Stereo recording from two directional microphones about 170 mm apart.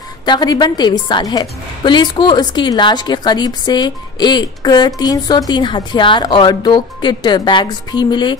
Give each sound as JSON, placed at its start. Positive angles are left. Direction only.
{"t": 0.2, "sound": "a woman's voice", "side_deg": 25}